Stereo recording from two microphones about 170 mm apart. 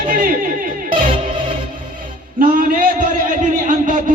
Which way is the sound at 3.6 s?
50° right (ahead or behind).